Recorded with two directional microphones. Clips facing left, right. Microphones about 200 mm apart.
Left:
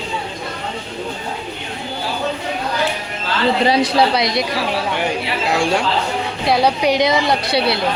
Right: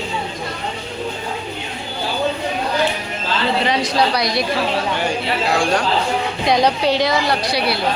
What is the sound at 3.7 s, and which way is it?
Speech, 30° left (ahead or behind).